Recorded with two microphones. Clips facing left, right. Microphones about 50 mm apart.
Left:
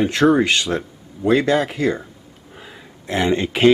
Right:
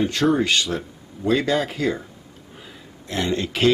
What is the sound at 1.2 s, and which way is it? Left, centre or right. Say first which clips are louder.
Speech: left 4 dB; centre.